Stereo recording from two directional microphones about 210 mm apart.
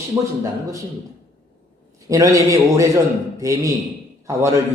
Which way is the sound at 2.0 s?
15° right (ahead or behind).